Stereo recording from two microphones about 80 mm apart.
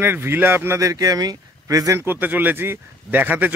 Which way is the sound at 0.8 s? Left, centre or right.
Right.